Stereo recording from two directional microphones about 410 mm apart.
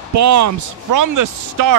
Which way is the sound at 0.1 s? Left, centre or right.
Right.